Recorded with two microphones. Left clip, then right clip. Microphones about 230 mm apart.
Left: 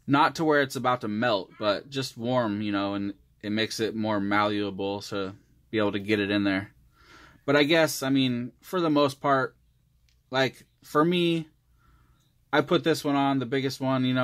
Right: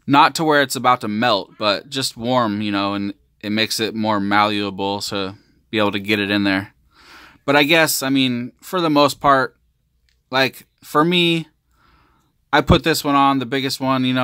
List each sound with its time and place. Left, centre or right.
0.0 s speech: right